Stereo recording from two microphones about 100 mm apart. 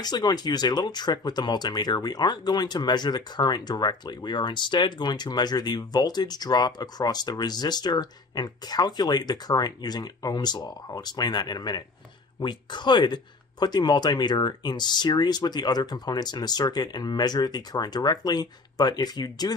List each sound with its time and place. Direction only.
0.0 s speech: 40° left (ahead or behind)